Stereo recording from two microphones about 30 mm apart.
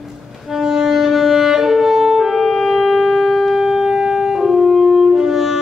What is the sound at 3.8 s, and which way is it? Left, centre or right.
Music, right.